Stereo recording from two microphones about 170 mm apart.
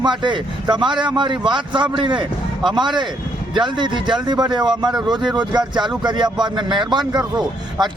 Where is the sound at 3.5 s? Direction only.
25° right (ahead or behind).